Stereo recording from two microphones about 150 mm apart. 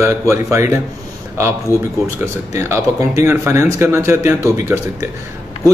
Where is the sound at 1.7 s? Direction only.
20° left (ahead or behind).